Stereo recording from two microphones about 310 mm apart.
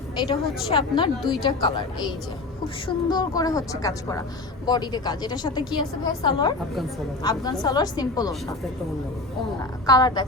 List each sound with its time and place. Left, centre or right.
0.3 s a woman's voice: centre
2.8 s a woman's voice: centre
9.8 s a woman's voice: centre